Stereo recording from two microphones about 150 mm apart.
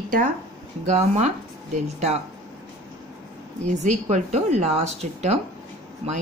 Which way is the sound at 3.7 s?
50° right (ahead or behind).